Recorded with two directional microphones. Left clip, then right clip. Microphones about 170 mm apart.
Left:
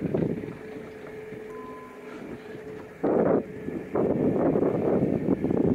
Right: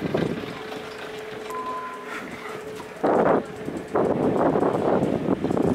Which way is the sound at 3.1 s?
25° left (ahead or behind).